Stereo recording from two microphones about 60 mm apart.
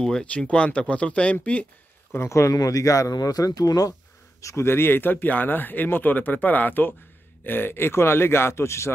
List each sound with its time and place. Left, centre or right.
0.0 s speech: centre
2.1 s speech: left
4.4 s speech: left
4.6 s speech: left